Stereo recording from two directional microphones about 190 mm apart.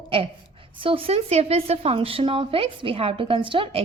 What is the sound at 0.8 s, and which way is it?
A woman's voice, 30° right (ahead or behind).